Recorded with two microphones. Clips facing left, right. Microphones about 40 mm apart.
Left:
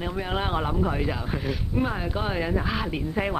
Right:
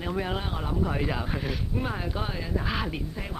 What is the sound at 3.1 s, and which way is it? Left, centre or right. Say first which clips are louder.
Speech: left 10 dB; left.